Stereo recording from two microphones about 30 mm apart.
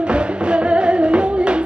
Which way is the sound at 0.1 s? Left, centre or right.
Right.